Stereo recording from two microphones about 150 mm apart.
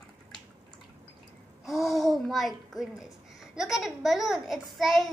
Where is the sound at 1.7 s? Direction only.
Centre (ahead or behind).